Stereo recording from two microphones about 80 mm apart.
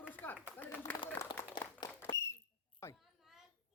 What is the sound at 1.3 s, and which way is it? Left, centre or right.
Speech, left.